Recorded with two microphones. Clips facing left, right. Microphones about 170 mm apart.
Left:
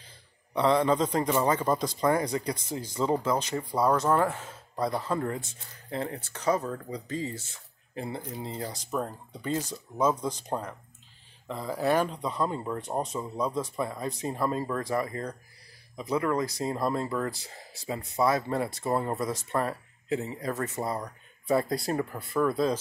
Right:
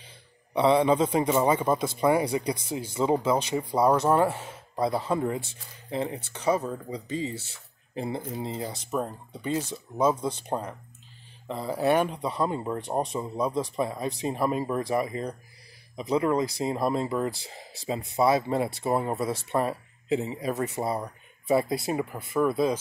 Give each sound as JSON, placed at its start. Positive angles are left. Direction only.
{"t": 0.5, "sound": "speech", "side_deg": -15}
{"t": 11.4, "sound": "speech", "side_deg": -20}